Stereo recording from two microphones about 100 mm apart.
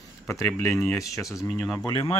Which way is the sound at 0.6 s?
30° left (ahead or behind).